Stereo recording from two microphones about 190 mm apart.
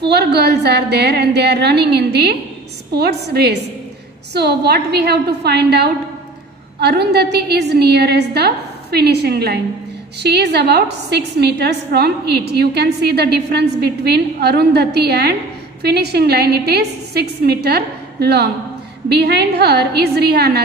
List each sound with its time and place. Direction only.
0.0 s a woman's voice: 60° right (ahead or behind)